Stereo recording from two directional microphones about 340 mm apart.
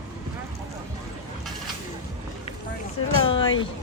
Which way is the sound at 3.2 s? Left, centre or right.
Centre.